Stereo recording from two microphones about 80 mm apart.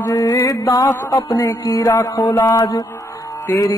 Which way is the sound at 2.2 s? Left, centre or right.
Left.